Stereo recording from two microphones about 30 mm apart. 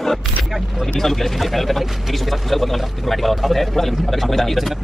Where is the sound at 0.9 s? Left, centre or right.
Centre.